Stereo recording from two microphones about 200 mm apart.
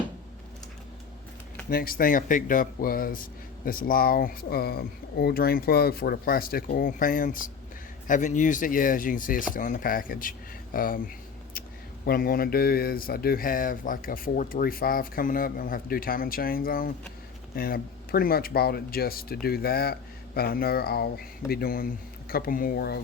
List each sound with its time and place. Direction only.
1.7 s speech: 45° left (ahead or behind)
12.0 s speech: 45° left (ahead or behind)